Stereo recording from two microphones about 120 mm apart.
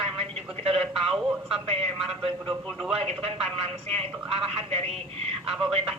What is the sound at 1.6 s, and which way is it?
Speech, 55° right (ahead or behind).